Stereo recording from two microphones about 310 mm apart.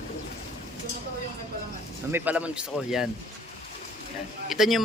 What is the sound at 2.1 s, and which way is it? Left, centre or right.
A man's voice, centre.